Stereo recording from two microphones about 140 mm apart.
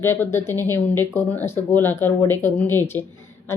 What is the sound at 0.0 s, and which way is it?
Speech, 15° left (ahead or behind).